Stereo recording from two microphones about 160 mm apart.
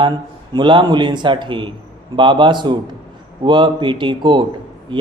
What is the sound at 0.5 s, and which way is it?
A man's voice, 30° right (ahead or behind).